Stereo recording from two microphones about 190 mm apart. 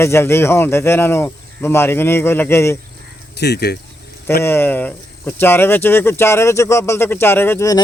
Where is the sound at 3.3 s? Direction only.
60° left (ahead or behind).